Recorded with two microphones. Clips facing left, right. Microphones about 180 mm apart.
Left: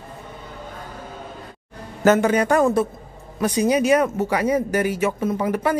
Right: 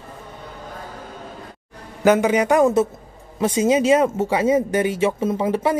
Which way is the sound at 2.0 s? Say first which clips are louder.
Right 1 dB; 15° right (ahead or behind).